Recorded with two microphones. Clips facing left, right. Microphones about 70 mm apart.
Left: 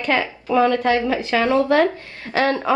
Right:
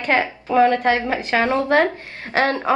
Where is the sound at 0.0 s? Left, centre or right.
Right.